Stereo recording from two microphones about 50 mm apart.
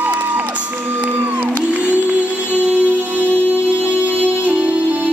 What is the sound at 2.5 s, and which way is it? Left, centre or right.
Music, right.